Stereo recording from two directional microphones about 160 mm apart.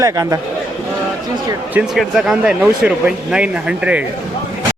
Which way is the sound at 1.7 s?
5° right (ahead or behind).